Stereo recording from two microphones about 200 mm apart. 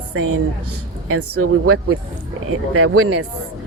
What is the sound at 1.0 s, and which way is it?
Speech, 90° right.